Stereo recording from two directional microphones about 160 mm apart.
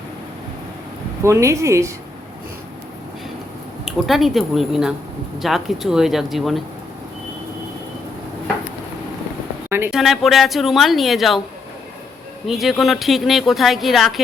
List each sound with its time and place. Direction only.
1.2 s a woman's voice: 20° right (ahead or behind)
3.8 s a woman's voice: centre (ahead or behind)
9.6 s a sound: 15° right (ahead or behind)
9.9 s a woman's voice: centre (ahead or behind)
12.5 s a woman's voice: centre (ahead or behind)